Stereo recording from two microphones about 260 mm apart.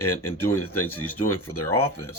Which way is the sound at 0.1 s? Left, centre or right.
Centre.